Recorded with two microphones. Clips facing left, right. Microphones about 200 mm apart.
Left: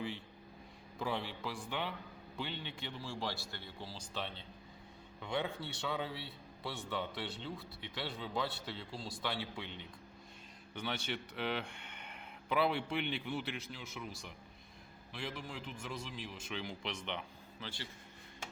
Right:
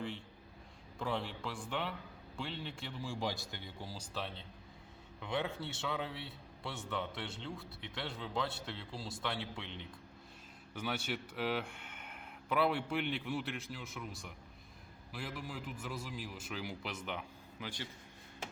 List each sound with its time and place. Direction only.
0.9 s speech: centre (ahead or behind)
3.0 s speech: 15° right (ahead or behind)
4.1 s speech: centre (ahead or behind)
10.8 s speech: 5° right (ahead or behind)